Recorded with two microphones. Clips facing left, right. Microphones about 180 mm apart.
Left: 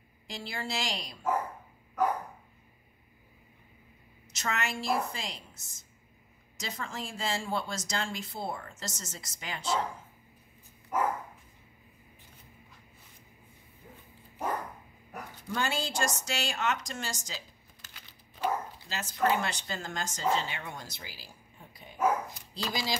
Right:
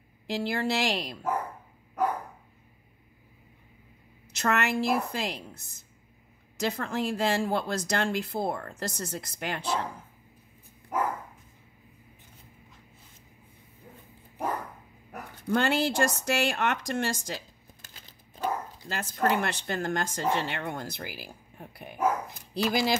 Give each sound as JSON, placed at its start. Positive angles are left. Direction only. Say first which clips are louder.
{"t": 0.3, "sound": "speech", "louder": "right 9 dB", "side_deg": -60}
{"t": 4.4, "sound": "speech", "louder": "right 7 dB", "side_deg": -60}
{"t": 15.4, "sound": "speech", "louder": "right 8 dB", "side_deg": -60}
{"t": 18.4, "sound": "speech", "louder": "even", "side_deg": -55}